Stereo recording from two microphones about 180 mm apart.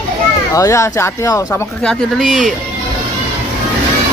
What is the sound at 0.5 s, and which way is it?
Speech, 15° left (ahead or behind).